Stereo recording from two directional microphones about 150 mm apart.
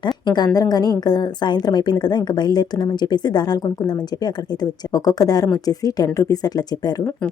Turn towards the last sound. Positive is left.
turn(degrees=25)  # may be behind; listen again after turning